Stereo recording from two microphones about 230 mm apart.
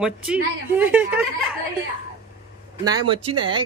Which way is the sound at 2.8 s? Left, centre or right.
Centre.